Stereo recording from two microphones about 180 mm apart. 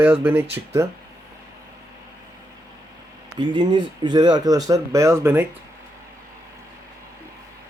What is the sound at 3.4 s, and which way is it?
Speech, 25° right (ahead or behind).